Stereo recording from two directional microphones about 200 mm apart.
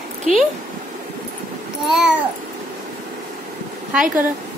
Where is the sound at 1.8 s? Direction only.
5° right (ahead or behind).